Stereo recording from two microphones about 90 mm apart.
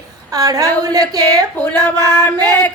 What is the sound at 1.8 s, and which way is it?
Speech, 25° left (ahead or behind).